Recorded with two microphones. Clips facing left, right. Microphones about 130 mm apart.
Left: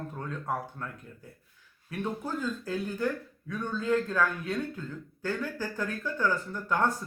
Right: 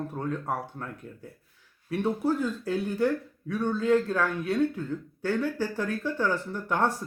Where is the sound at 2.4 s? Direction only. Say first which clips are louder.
Right 4 dB; 20° right (ahead or behind).